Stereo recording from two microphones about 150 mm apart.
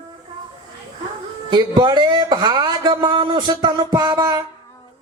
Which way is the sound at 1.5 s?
30° right (ahead or behind).